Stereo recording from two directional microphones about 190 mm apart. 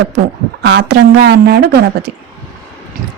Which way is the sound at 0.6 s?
60° right (ahead or behind).